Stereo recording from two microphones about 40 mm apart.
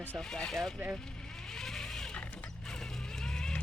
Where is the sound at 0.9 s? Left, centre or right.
Centre.